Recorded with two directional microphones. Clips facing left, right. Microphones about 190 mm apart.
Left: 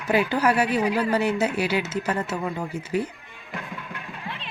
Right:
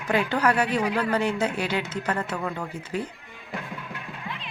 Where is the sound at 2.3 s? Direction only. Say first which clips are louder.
Left 2 dB; 20° left (ahead or behind).